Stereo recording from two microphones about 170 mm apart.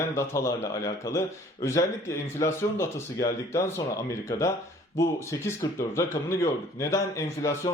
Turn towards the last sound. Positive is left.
turn(degrees=15)  # may be behind; listen again after turning